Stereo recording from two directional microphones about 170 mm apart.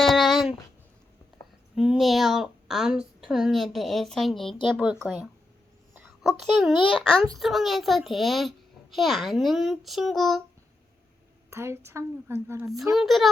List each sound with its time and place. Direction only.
0.0 s a sound: centre (ahead or behind)
1.7 s a child's voice: 5° right (ahead or behind)
6.4 s a child's voice: centre (ahead or behind)
6.7 s a child's voice: 30° left (ahead or behind)
7.3 s a child's voice: centre (ahead or behind)
11.5 s a woman's voice: 15° right (ahead or behind)
12.9 s a child's voice: centre (ahead or behind)